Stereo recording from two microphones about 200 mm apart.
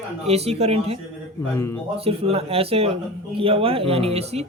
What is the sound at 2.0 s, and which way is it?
A man's voice, 30° right (ahead or behind).